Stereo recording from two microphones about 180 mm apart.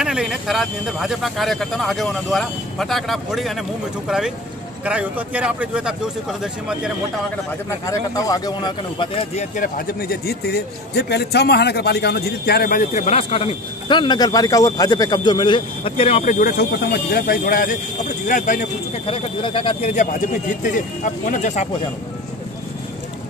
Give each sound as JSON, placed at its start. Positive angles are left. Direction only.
{"t": 0.0, "sound": "speech", "side_deg": -5}
{"t": 4.8, "sound": "a man's voice", "side_deg": -5}
{"t": 7.8, "sound": "speech", "side_deg": 20}
{"t": 9.8, "sound": "a man's voice", "side_deg": 60}
{"t": 16.3, "sound": "speech", "side_deg": 50}
{"t": 19.1, "sound": "speech", "side_deg": 30}
{"t": 19.9, "sound": "speech", "side_deg": 45}